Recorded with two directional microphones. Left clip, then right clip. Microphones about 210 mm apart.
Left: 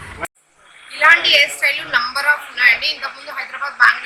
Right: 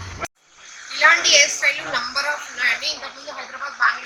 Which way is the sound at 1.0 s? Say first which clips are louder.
Left 3 dB; 5° right (ahead or behind).